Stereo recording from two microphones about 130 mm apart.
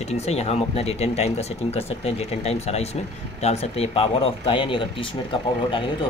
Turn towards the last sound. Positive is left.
turn(degrees=40)  # may be behind; listen again after turning